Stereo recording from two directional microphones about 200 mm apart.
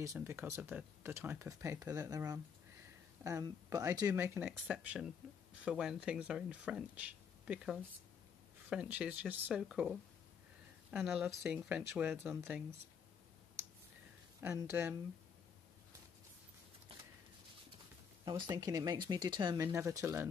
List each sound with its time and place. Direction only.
0.0 s speech: 15° right (ahead or behind)
14.4 s speech: 10° right (ahead or behind)
18.2 s speech: 25° right (ahead or behind)